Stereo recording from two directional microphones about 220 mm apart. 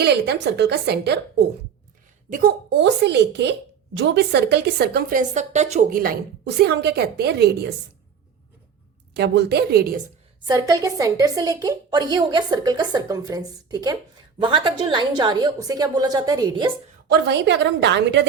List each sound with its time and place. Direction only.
0.0 s a woman's voice: 50° right (ahead or behind)
9.1 s a woman's voice: 50° right (ahead or behind)
10.5 s a woman's voice: 15° right (ahead or behind)
17.1 s a woman's voice: 50° right (ahead or behind)